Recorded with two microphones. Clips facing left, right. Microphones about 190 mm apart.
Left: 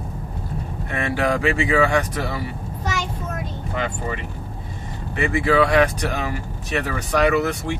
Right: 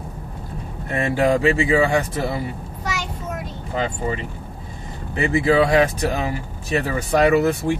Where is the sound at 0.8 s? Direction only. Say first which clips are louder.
Right 4 dB; 35° right (ahead or behind).